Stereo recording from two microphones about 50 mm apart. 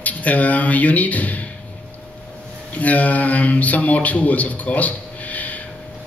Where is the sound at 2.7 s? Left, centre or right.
Left.